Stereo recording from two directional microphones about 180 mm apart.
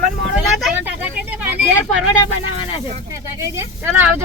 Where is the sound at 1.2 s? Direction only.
10° right (ahead or behind).